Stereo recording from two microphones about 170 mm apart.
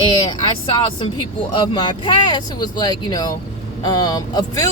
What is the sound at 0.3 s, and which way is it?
Speech, 25° left (ahead or behind).